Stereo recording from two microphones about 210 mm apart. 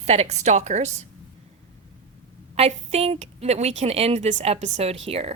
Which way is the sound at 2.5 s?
30° right (ahead or behind).